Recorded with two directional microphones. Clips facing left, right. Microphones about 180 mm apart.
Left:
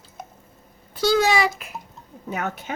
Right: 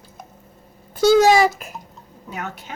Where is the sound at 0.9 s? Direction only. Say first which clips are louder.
Right 6 dB; 45° right (ahead or behind).